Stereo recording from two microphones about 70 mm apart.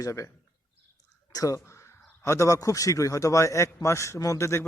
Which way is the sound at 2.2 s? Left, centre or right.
Left.